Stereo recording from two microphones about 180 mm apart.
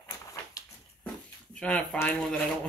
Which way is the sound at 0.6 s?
20° left (ahead or behind).